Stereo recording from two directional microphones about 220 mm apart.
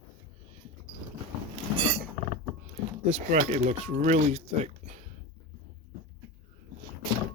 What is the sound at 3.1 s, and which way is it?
Speech, 30° right (ahead or behind).